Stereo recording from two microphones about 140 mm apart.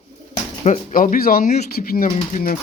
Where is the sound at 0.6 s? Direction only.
50° left (ahead or behind).